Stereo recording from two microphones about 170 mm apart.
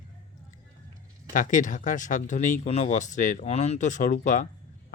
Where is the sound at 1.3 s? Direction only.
50° left (ahead or behind).